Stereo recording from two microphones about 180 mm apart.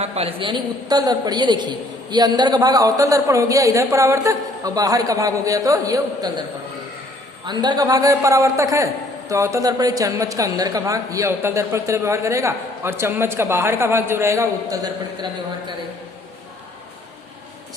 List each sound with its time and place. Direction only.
0.0 s a woman's voice: 35° right (ahead or behind)
7.4 s a man's voice: 25° right (ahead or behind)